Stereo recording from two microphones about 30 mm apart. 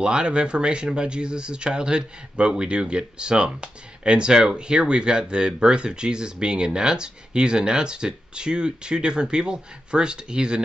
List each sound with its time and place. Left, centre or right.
0.0 s speech: right